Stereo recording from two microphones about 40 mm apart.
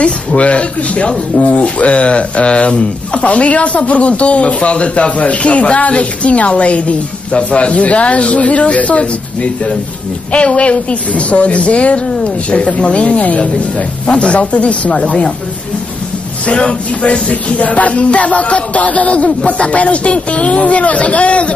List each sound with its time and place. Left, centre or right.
0.0 s speech: left
16.4 s speech: left